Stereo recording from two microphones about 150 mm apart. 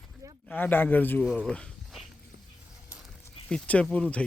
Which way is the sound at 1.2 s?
Centre (ahead or behind).